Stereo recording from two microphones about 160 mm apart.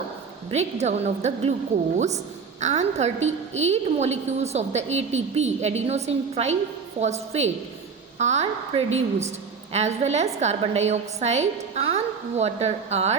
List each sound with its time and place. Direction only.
0.5 s a woman's voice: 45° right (ahead or behind)
2.6 s a woman's voice: 45° right (ahead or behind)